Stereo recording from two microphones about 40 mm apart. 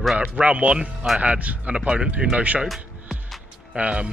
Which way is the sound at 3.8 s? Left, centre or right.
Right.